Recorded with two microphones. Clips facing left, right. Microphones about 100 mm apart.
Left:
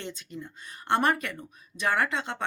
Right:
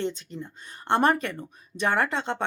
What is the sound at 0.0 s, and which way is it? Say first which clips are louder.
A woman's voice: right 7 dB; 35° right (ahead or behind).